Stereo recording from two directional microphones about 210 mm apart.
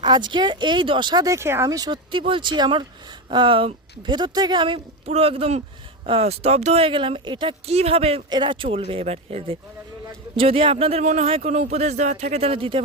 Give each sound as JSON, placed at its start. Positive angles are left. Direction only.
{"t": 0.0, "sound": "speech", "side_deg": -20}